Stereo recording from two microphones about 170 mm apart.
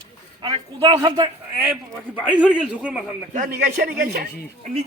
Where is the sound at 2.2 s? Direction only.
5° right (ahead or behind).